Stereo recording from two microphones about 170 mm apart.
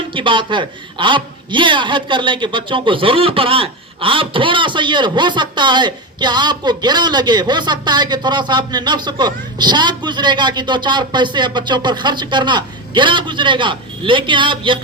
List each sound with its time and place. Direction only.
0.1 s a man's voice: 30° right (ahead or behind)